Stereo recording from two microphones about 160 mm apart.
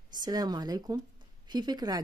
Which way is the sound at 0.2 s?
25° right (ahead or behind).